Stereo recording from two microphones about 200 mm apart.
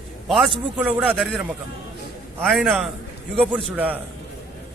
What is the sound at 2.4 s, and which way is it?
A man's voice, centre (ahead or behind).